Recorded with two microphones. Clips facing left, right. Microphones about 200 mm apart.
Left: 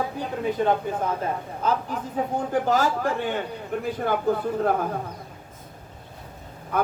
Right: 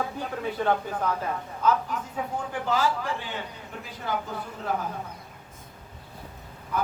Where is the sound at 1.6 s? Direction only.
35° left (ahead or behind); by 4.9 s 55° left (ahead or behind).